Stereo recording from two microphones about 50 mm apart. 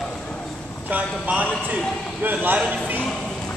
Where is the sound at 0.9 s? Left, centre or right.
Right.